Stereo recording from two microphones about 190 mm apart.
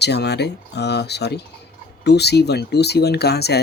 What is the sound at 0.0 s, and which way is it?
Speech, 60° left (ahead or behind).